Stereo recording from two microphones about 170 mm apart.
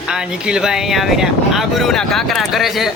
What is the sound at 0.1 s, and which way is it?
Speech, 5° right (ahead or behind).